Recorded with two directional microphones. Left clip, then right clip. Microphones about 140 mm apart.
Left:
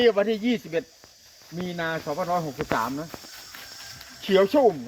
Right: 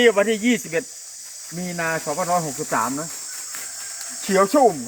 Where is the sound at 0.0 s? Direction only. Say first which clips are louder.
Right 4 dB; 25° right (ahead or behind).